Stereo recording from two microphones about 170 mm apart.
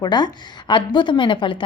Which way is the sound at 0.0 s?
25° left (ahead or behind).